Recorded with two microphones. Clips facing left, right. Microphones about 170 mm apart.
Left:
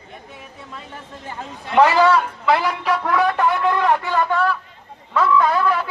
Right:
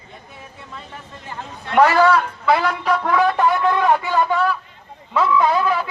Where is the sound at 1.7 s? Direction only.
10° left (ahead or behind).